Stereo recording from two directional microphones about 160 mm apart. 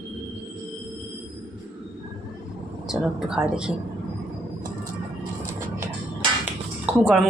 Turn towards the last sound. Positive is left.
turn(degrees=-5)  # may be behind; listen again after turning